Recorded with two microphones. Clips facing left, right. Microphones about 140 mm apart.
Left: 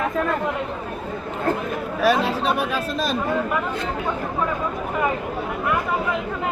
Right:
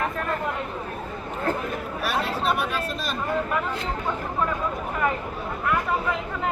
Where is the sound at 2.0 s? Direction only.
90° left.